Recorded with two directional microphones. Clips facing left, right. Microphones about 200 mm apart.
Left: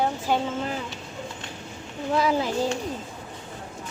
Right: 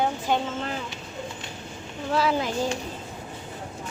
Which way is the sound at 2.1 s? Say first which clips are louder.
Left 1 dB; 15° left (ahead or behind).